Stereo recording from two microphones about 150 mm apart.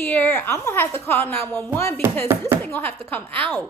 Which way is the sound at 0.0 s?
15° left (ahead or behind).